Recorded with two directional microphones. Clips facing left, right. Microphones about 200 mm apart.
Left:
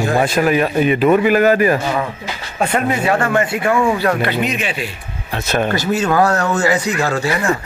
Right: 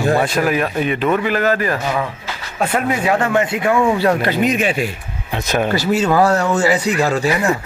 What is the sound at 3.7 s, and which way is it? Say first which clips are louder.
Speech: right 1 dB; 5° right (ahead or behind).